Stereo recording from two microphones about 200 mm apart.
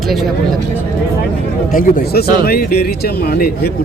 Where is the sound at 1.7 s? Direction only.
45° left (ahead or behind).